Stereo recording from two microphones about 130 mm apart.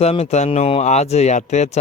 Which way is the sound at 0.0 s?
55° left (ahead or behind).